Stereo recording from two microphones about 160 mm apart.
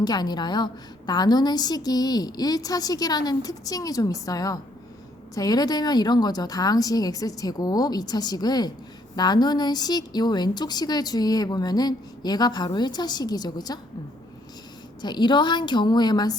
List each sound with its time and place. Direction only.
0.0 s a woman's voice: 25° left (ahead or behind)
15.0 s a woman's voice: 30° left (ahead or behind)